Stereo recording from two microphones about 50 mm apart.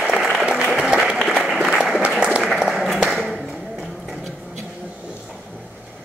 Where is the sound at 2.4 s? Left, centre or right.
Centre.